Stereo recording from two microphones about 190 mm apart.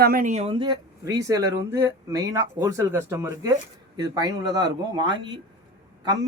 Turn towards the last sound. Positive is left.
turn(degrees=-20)  # may be behind; listen again after turning